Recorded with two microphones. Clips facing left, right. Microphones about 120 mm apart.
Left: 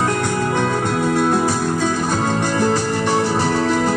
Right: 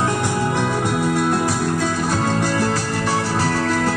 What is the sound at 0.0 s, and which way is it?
Music, 10° right (ahead or behind).